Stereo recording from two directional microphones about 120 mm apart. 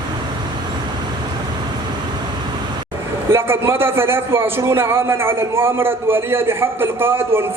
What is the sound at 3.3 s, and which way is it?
A man's voice, 20° right (ahead or behind).